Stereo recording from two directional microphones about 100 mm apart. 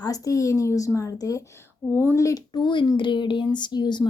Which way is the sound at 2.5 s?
50° left (ahead or behind).